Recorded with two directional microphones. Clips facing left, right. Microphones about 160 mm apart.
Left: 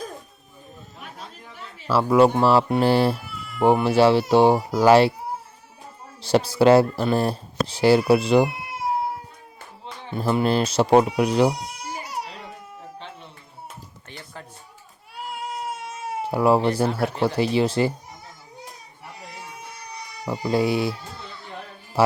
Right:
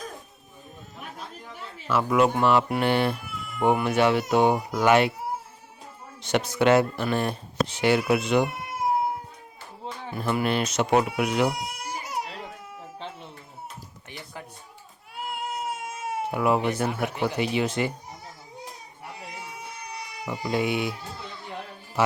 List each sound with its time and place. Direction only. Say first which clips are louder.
1.9 s speech: left 5 dB; 30° left (ahead or behind)
6.2 s speech: left 5 dB; 35° left (ahead or behind)
10.1 s speech: left 4 dB; 25° left (ahead or behind)
11.8 s baby cry: even; centre (ahead or behind)
14.1 s a sound: even; 15° right (ahead or behind)
15.4 s baby cry: left 1 dB; centre (ahead or behind)
16.2 s speech: left 5 dB; 35° left (ahead or behind)
20.2 s speech: left 4 dB; 35° left (ahead or behind)
22.0 s speech: left 5 dB; 35° left (ahead or behind)